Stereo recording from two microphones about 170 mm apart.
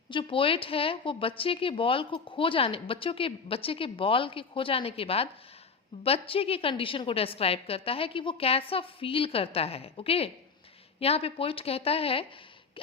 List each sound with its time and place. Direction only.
0.1 s speech: 30° left (ahead or behind)